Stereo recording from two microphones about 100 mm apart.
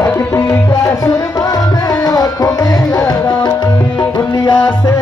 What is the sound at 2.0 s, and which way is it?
Tabla, 40° left (ahead or behind).